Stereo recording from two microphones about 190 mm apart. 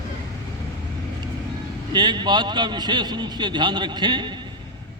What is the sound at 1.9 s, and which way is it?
A man's voice, 20° right (ahead or behind).